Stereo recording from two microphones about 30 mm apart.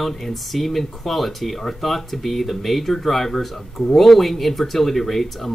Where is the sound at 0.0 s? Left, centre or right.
Centre.